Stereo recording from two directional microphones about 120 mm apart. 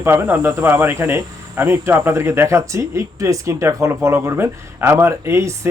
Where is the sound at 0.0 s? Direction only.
20° right (ahead or behind).